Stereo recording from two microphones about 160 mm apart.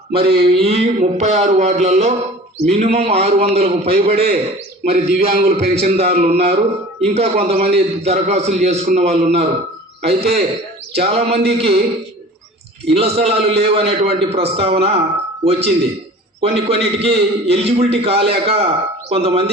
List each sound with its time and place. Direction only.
0.1 s a sound: 35° right (ahead or behind)
2.6 s a man's voice: 40° right (ahead or behind)
12.9 s a man's voice: 40° right (ahead or behind)